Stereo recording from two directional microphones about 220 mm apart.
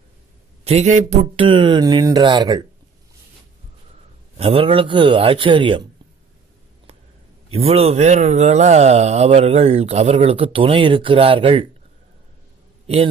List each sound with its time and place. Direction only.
0.7 s speech: 30° right (ahead or behind)
4.4 s speech: 25° right (ahead or behind)
7.5 s speech: 30° right (ahead or behind)
12.8 s a man's voice: 25° right (ahead or behind)